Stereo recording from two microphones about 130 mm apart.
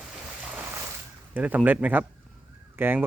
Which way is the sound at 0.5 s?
20° right (ahead or behind).